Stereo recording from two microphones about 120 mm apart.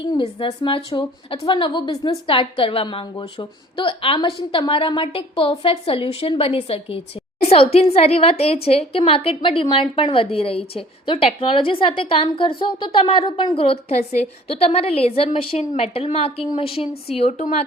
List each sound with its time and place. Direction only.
0.0 s a woman's voice: 45° left (ahead or behind)
2.3 s a woman's voice: 45° left (ahead or behind)
15.7 s a woman's voice: 65° left (ahead or behind)